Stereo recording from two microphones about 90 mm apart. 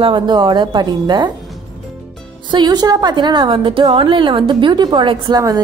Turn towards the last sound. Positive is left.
turn(degrees=-45)  # may be behind; listen again after turning